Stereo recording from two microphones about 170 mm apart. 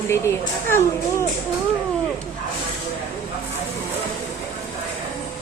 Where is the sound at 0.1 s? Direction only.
15° left (ahead or behind).